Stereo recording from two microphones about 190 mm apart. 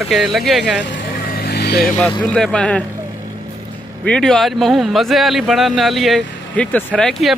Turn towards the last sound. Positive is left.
turn(degrees=0)  # may be behind; listen again after turning